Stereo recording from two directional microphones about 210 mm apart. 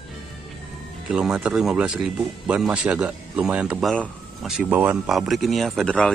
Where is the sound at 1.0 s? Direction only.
5° right (ahead or behind).